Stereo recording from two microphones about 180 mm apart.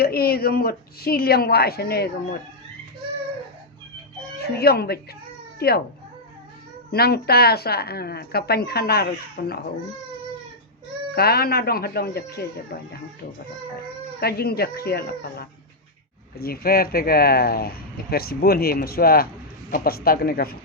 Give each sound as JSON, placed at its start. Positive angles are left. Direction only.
{"t": 0.0, "sound": "speech", "side_deg": 60}
{"t": 4.4, "sound": "speech", "side_deg": 60}
{"t": 6.9, "sound": "speech", "side_deg": 60}
{"t": 11.1, "sound": "speech", "side_deg": 60}
{"t": 14.2, "sound": "speech", "side_deg": 60}